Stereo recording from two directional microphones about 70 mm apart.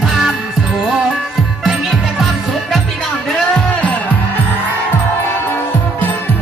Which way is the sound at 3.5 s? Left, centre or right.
Left.